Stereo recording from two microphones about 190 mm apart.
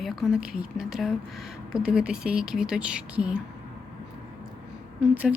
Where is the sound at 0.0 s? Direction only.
Centre (ahead or behind).